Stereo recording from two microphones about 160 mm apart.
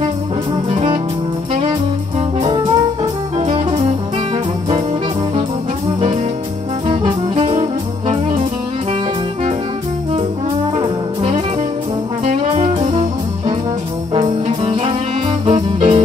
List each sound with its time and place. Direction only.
0.7 s music: 30° right (ahead or behind)
6.9 s music: 30° right (ahead or behind)
12.3 s brass instrument: 40° right (ahead or behind)
14.1 s brass instrument: 30° right (ahead or behind)
15.4 s music: 30° right (ahead or behind)